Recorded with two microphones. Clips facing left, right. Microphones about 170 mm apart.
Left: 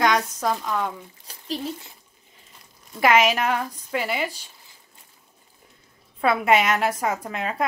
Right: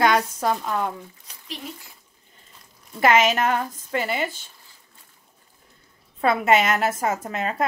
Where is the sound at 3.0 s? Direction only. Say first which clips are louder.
Even; centre (ahead or behind).